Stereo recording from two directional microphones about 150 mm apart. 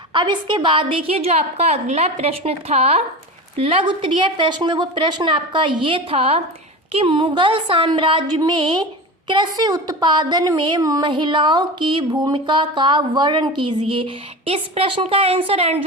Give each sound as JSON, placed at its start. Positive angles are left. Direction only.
{"t": 0.1, "sound": "a woman's voice", "side_deg": -30}